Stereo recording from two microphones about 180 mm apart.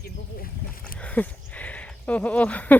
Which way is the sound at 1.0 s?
10° left (ahead or behind).